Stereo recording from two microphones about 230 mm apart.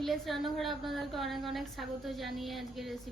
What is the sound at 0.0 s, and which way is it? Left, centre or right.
A woman's voice, centre.